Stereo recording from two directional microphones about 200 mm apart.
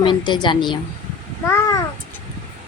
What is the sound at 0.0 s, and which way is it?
Speech, 25° left (ahead or behind).